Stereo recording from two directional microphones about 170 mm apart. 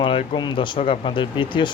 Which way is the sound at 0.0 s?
30° left (ahead or behind).